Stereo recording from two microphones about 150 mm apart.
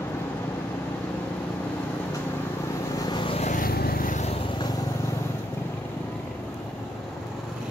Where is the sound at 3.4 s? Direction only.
65° left (ahead or behind).